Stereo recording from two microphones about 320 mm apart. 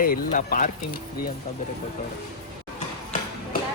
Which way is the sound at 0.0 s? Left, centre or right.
Left.